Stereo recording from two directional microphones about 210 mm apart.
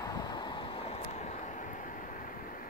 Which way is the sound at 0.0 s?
20° left (ahead or behind).